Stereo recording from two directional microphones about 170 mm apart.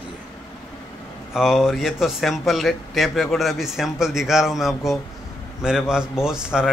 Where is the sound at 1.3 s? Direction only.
Centre (ahead or behind).